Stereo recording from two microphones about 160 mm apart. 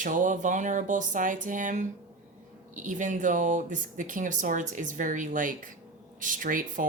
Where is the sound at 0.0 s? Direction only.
55° right (ahead or behind).